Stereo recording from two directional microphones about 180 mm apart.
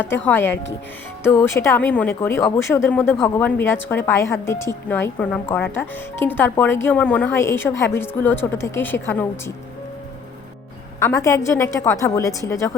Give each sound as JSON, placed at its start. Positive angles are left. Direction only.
{"t": 0.0, "sound": "speech", "side_deg": 10}
{"t": 11.0, "sound": "speech", "side_deg": 15}